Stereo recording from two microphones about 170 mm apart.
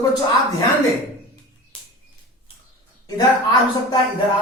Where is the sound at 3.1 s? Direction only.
20° left (ahead or behind).